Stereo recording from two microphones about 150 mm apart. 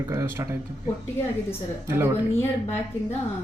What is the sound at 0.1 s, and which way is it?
Speech, 20° right (ahead or behind).